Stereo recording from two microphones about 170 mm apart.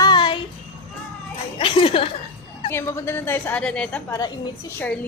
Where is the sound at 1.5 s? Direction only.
35° left (ahead or behind).